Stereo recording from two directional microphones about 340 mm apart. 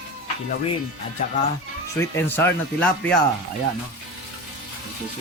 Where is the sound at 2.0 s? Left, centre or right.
Centre.